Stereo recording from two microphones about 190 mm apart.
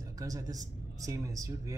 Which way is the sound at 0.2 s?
20° right (ahead or behind).